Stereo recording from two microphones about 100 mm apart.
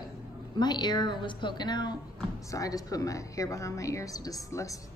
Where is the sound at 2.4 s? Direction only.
35° left (ahead or behind).